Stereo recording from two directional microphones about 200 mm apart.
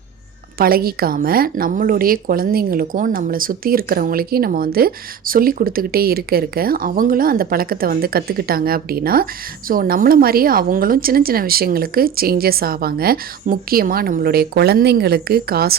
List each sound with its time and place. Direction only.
0.6 s a woman's voice: 50° right (ahead or behind)